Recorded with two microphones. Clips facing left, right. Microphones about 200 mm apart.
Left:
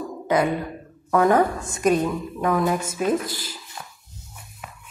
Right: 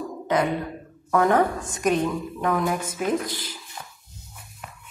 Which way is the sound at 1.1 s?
10° left (ahead or behind).